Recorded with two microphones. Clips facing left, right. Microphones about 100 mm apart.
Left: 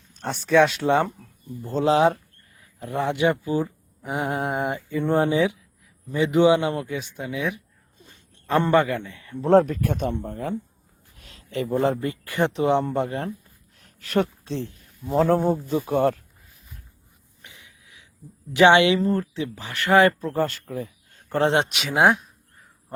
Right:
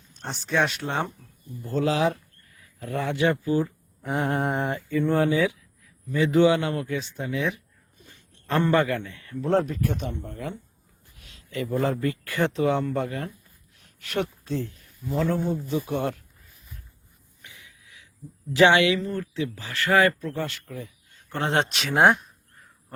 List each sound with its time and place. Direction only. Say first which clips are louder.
0.8 s speech: left 10 dB; 90° left
1.6 s speech: left 4 dB; 25° left (ahead or behind); by 7.6 s 10° left (ahead or behind)
7.9 s a sound: left 1 dB; 20° left (ahead or behind)
9.4 s speech: left 6 dB; 35° left (ahead or behind)
9.6 s speech: left 3 dB; 50° left (ahead or behind)
10.2 s speech: left 6 dB; 35° left (ahead or behind)
13.7 s a sound: left 5 dB; 40° left (ahead or behind)
14.5 s speech: even; 25° left (ahead or behind); by 16.1 s 45° left (ahead or behind)
17.4 s a sound: even; 20° left (ahead or behind)
18.5 s speech: left 3 dB; 20° left (ahead or behind)
18.9 s speech: left 7 dB; 35° left (ahead or behind)
19.2 s speech: even; 20° left (ahead or behind); by 21.4 s 45° left (ahead or behind)
21.4 s speech: left 3 dB; 15° left (ahead or behind); by 22.3 s centre (ahead or behind)